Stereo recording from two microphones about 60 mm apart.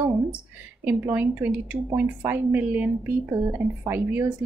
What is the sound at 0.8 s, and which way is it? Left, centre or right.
Speech, right.